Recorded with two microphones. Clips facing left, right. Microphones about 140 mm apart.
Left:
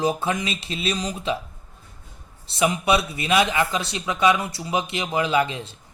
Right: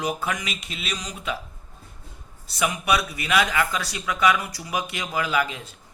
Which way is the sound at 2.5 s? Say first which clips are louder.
Left 3 dB; 25° left (ahead or behind).